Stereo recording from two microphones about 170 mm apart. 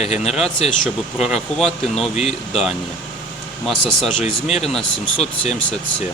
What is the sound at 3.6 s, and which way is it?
Speech, centre (ahead or behind).